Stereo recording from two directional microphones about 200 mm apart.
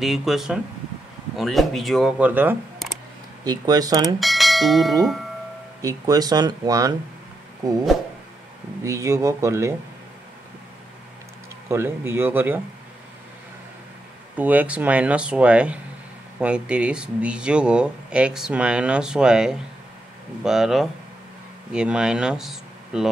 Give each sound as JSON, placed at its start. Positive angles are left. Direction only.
{"t": 0.0, "sound": "speech", "side_deg": 0}
{"t": 3.4, "sound": "speech", "side_deg": -20}
{"t": 4.2, "sound": "bell", "side_deg": 0}
{"t": 5.8, "sound": "speech", "side_deg": -20}
{"t": 8.8, "sound": "speech", "side_deg": -15}
{"t": 11.7, "sound": "speech", "side_deg": -10}
{"t": 14.3, "sound": "speech", "side_deg": -10}